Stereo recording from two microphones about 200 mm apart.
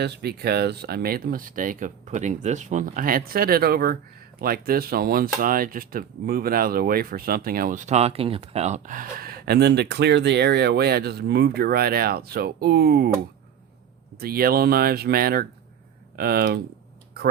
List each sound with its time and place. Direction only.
0.0 s speech: 55° right (ahead or behind)
14.2 s speech: 50° right (ahead or behind)